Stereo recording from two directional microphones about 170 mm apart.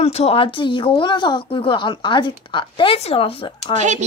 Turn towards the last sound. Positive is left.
turn(degrees=-45)  # may be behind; listen again after turning